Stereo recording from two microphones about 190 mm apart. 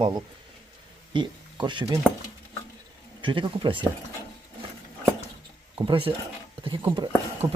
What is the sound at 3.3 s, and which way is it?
Speech, 25° right (ahead or behind).